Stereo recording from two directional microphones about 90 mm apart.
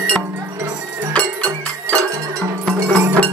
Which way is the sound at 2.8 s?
30° right (ahead or behind).